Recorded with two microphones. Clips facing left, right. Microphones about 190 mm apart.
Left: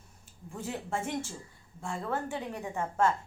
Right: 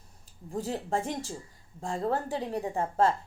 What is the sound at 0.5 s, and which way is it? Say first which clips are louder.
A woman's voice: right 5 dB; 35° right (ahead or behind).